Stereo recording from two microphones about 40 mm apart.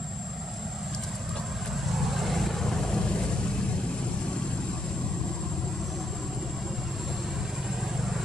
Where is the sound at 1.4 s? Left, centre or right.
Centre.